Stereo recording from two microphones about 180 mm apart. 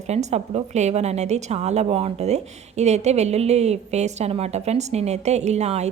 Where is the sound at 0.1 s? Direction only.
40° right (ahead or behind).